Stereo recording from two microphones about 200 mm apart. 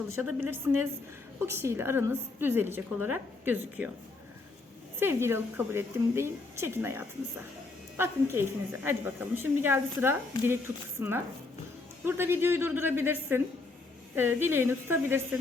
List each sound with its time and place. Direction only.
0.2 s a woman's voice: 10° right (ahead or behind)
4.9 s a woman's voice: 10° right (ahead or behind)
12.0 s a woman's voice: 10° right (ahead or behind)